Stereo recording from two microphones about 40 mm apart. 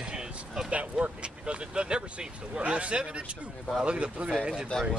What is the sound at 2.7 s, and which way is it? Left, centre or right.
A man's voice, right.